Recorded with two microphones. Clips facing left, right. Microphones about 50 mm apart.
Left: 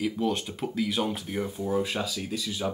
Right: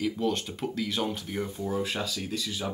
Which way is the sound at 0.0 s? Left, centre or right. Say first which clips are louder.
Left 1 dB; centre.